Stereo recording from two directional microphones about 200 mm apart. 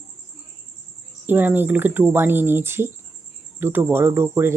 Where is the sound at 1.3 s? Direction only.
10° right (ahead or behind).